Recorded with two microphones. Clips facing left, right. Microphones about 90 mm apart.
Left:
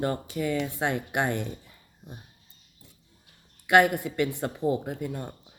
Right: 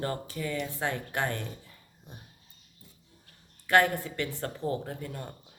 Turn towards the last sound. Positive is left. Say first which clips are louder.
# left 5 dB
turn(degrees=15)  # may be behind; listen again after turning